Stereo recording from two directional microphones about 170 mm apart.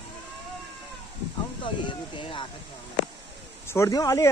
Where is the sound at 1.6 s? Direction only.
30° left (ahead or behind).